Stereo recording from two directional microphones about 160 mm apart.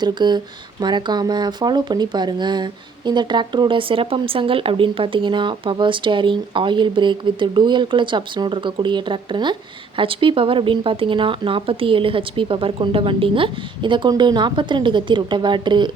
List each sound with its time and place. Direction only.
0.0 s speech: 25° right (ahead or behind)